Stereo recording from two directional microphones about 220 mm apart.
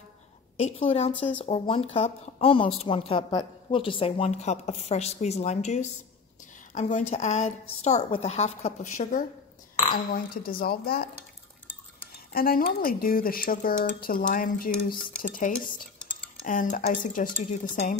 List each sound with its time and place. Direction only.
0.6 s a woman's voice: 30° left (ahead or behind)
12.3 s a woman's voice: 40° left (ahead or behind)